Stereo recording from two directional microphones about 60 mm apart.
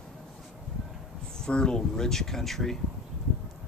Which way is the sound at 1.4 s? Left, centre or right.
Centre.